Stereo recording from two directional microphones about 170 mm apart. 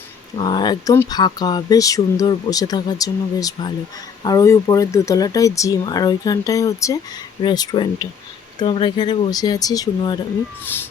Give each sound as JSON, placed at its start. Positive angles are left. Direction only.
{"t": 0.3, "sound": "speech", "side_deg": 25}
{"t": 10.6, "sound": "speech", "side_deg": 10}